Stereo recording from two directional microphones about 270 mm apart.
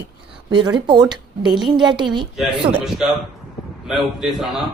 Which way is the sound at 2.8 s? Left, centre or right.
Centre.